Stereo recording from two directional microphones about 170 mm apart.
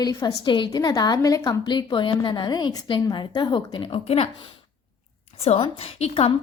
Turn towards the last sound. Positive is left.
turn(degrees=35)  # may be behind; listen again after turning